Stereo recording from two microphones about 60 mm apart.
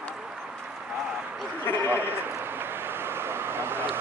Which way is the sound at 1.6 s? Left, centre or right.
Left.